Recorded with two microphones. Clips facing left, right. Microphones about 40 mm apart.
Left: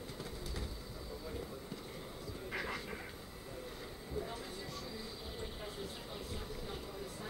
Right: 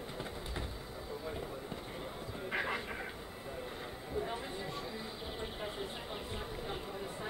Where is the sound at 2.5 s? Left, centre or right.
Right.